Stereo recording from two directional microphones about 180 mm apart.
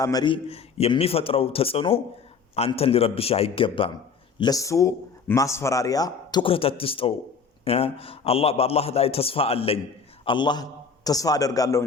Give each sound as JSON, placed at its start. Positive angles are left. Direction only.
{"t": 0.0, "sound": "speech", "side_deg": 20}
{"t": 0.4, "sound": "a man's voice", "side_deg": 35}